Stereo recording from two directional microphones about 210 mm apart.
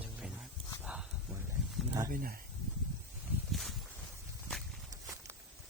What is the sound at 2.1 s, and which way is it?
Speech, 45° right (ahead or behind).